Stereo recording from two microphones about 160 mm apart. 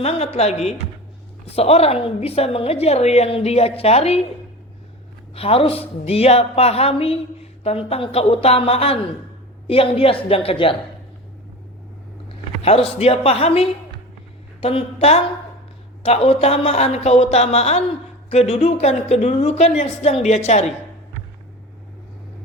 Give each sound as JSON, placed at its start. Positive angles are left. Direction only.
{"t": 0.0, "sound": "a woman's voice", "side_deg": 40}
{"t": 5.3, "sound": "a woman's voice", "side_deg": 35}
{"t": 12.6, "sound": "a woman's voice", "side_deg": 35}